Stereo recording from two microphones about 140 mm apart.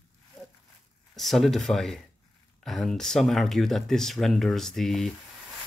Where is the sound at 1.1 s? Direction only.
Centre (ahead or behind).